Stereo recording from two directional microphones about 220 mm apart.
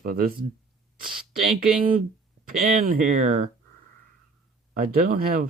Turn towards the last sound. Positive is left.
turn(degrees=-40)  # may be behind; listen again after turning